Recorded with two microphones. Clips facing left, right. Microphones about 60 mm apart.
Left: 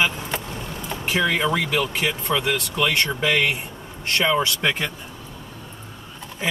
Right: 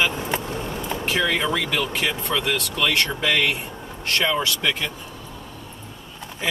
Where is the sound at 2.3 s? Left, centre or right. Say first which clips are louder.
Left 1 dB; centre.